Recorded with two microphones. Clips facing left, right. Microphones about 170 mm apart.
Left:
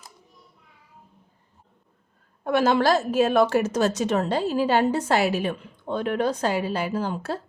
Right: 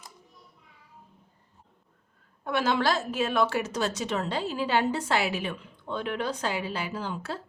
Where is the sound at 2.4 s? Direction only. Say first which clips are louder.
Left 6 dB; 45° left (ahead or behind).